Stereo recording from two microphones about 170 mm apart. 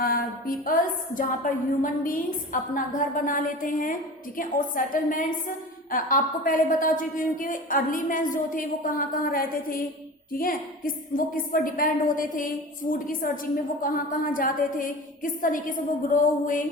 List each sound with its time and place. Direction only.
0.0 s a woman's voice: 55° left (ahead or behind)